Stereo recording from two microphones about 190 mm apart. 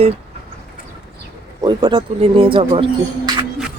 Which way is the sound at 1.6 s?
25° right (ahead or behind).